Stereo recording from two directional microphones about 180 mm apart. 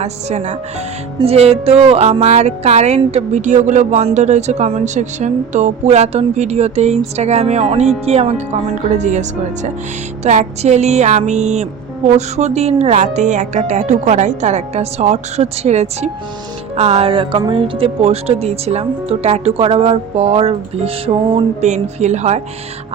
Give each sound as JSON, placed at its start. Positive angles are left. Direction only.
{"t": 0.0, "sound": "speech", "side_deg": -40}
{"t": 10.2, "sound": "speech", "side_deg": -40}